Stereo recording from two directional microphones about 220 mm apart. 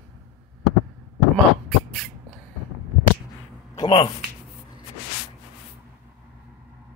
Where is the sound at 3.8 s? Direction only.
20° left (ahead or behind).